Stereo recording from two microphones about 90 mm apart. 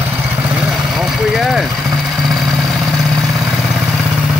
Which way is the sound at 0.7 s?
5° right (ahead or behind).